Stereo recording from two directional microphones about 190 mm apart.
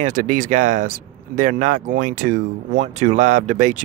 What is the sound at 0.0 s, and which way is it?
Speech, 45° right (ahead or behind).